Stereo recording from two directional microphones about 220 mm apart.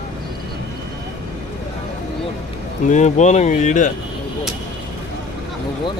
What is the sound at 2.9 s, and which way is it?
A man's voice, 30° left (ahead or behind).